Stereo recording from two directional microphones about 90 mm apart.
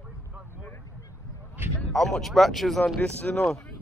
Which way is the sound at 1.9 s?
Centre (ahead or behind).